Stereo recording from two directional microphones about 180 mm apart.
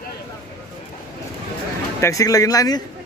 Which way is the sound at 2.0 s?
15° left (ahead or behind).